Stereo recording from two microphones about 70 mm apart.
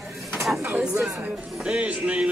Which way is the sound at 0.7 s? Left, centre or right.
Centre.